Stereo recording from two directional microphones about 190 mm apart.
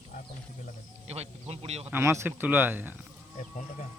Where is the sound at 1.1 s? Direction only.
35° right (ahead or behind).